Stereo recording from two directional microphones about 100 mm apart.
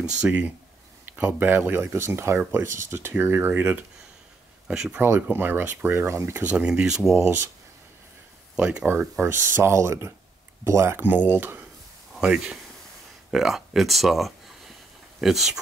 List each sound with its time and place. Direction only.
0.0 s speech: 10° right (ahead or behind)
4.6 s speech: 10° right (ahead or behind)
5.0 s speech: 20° right (ahead or behind)
6.4 s speech: 10° right (ahead or behind)
7.2 s speech: 25° right (ahead or behind)
8.5 s speech: 10° right (ahead or behind)
9.2 s speech: 25° right (ahead or behind)
12.1 s speech: 10° right (ahead or behind)